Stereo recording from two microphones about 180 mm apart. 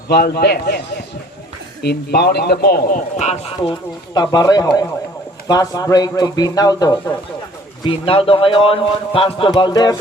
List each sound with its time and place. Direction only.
0.1 s a man's voice: 60° left (ahead or behind)
1.8 s a man's voice: 65° left (ahead or behind); by 3.7 s 40° left (ahead or behind)
3.7 s speech: 25° left (ahead or behind)